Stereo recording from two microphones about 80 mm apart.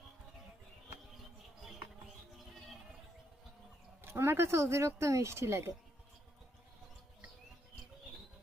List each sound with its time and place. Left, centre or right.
4.0 s speech: right